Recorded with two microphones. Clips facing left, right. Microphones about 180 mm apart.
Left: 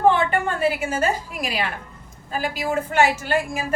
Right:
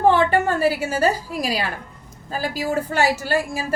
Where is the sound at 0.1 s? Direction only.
40° right (ahead or behind).